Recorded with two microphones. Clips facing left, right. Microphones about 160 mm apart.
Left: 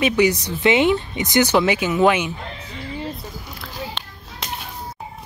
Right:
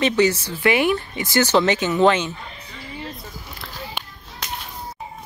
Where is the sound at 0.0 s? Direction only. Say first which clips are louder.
Left 1 dB; 10° left (ahead or behind).